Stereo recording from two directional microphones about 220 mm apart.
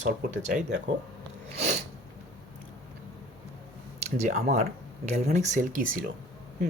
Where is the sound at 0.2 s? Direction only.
35° right (ahead or behind).